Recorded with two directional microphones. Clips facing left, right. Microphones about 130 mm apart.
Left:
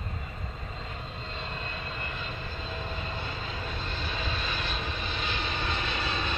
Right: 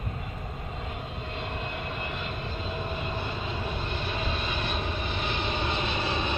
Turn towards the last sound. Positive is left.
turn(degrees=-20)  # may be behind; listen again after turning